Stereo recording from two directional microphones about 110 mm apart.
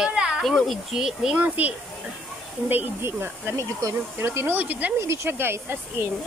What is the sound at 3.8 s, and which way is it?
Speech, 30° right (ahead or behind).